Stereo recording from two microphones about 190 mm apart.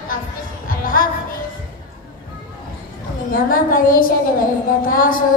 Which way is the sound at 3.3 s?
45° left (ahead or behind).